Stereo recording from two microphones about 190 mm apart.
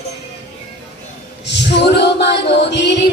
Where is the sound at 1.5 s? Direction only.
65° left (ahead or behind).